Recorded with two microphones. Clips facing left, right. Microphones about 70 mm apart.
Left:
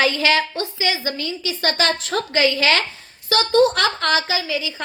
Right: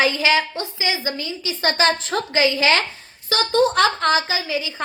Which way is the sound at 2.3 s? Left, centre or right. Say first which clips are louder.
Even; right.